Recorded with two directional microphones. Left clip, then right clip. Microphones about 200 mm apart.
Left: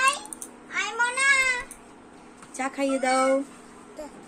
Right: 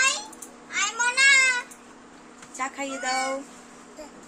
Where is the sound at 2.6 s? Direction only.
15° left (ahead or behind).